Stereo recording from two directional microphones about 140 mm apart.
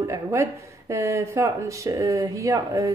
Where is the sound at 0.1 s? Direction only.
20° right (ahead or behind).